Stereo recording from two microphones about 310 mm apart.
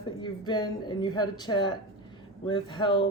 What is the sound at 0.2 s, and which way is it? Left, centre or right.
Speech, centre.